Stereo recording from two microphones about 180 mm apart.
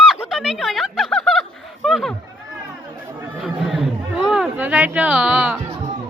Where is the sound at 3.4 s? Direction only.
Centre (ahead or behind).